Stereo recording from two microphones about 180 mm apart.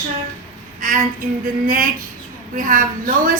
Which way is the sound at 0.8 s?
45° right (ahead or behind).